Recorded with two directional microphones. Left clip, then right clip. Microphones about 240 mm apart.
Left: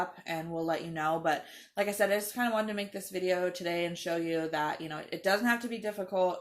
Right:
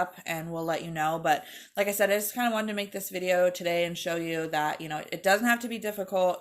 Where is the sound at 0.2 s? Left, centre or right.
Right.